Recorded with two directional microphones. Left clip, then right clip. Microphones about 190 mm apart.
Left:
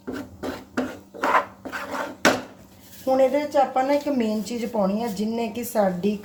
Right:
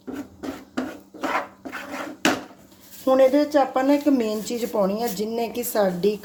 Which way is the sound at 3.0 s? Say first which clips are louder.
Right 3 dB; 45° right (ahead or behind).